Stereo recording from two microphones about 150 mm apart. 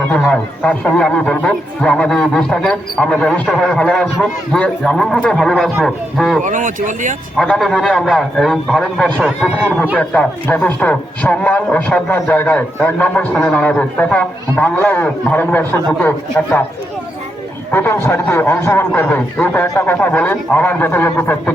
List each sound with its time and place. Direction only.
0.1 s a man's voice: 10° left (ahead or behind)
6.4 s speech: 60° right (ahead or behind)
7.3 s a man's voice: centre (ahead or behind)
17.7 s a man's voice: 15° left (ahead or behind)